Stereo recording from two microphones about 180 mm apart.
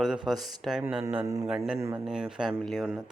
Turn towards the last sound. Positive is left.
turn(degrees=-5)  # may be behind; listen again after turning